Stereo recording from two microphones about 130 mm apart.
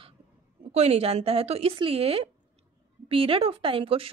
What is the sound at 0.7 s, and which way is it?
A woman's voice, 55° right (ahead or behind).